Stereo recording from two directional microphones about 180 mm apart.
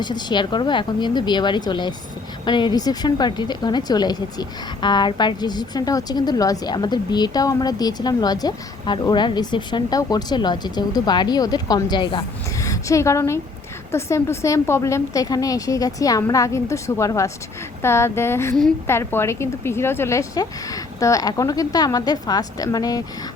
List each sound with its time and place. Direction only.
0.0 s a woman's voice: 25° left (ahead or behind)